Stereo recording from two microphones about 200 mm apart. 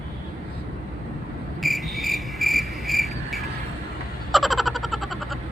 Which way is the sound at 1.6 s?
Centre (ahead or behind).